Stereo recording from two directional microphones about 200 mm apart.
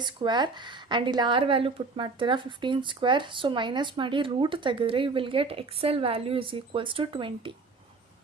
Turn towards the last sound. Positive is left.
turn(degrees=-25)  # may be behind; listen again after turning